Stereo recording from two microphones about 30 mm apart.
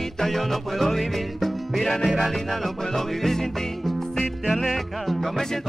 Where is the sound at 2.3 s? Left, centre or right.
Centre.